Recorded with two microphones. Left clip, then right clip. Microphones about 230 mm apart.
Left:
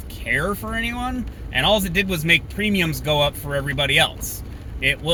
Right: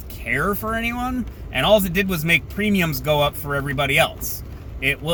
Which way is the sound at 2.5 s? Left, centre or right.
Centre.